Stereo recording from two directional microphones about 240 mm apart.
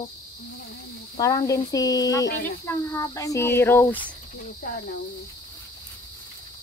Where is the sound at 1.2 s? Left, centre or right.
Centre.